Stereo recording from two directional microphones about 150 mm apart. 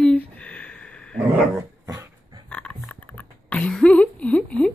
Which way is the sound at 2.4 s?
10° left (ahead or behind).